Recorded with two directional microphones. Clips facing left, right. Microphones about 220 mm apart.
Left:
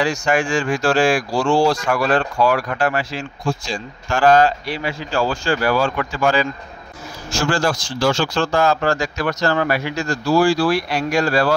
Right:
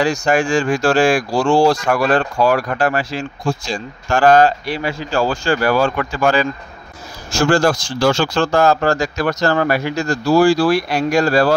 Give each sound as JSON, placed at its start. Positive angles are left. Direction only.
{"t": 0.0, "sound": "speech", "side_deg": -40}